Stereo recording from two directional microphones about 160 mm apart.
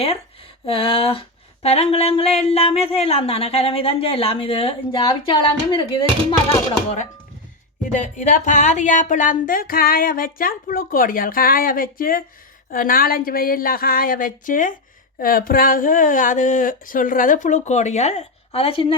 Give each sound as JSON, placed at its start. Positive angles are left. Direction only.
{"t": 0.6, "sound": "speech", "side_deg": 35}
{"t": 7.9, "sound": "speech", "side_deg": 50}